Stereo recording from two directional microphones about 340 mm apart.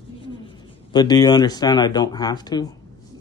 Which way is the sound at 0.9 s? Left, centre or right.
Centre.